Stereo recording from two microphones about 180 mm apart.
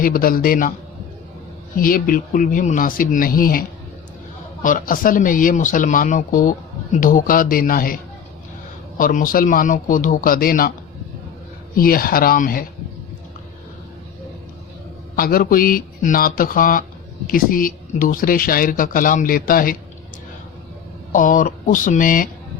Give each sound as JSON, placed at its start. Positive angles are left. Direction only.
{"t": 0.0, "sound": "speech", "side_deg": 55}
{"t": 1.7, "sound": "speech", "side_deg": 50}
{"t": 4.6, "sound": "speech", "side_deg": 50}
{"t": 9.0, "sound": "speech", "side_deg": 50}
{"t": 11.8, "sound": "speech", "side_deg": 55}
{"t": 15.1, "sound": "speech", "side_deg": 55}
{"t": 21.1, "sound": "speech", "side_deg": 45}